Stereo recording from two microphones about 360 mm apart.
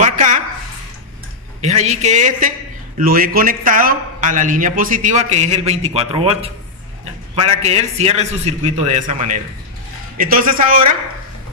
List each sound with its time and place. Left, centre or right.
0.0 s a sound: right
1.6 s a man's voice: centre
7.6 s a man's voice: centre